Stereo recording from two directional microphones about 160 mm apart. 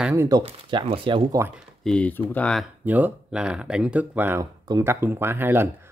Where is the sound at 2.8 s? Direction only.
10° right (ahead or behind).